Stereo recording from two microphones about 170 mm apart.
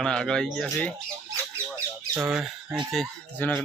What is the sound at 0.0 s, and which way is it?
Speech, 5° left (ahead or behind).